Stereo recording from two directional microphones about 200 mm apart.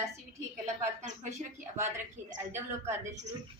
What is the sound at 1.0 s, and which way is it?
Speech, 35° right (ahead or behind).